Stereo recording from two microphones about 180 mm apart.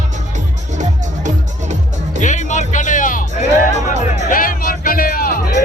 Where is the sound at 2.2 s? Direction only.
45° left (ahead or behind).